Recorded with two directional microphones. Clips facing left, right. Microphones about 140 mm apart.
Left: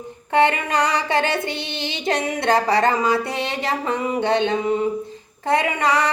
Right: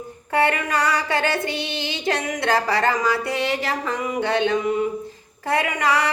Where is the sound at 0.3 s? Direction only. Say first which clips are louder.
Left 3 dB; 25° left (ahead or behind).